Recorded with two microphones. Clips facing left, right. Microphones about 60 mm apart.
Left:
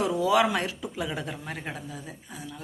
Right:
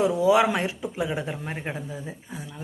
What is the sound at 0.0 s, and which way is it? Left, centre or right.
Speech, right.